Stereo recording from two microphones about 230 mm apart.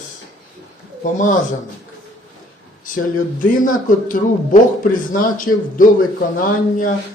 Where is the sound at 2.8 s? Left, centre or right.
Left.